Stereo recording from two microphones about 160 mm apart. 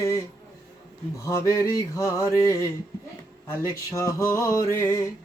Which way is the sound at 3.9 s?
20° left (ahead or behind).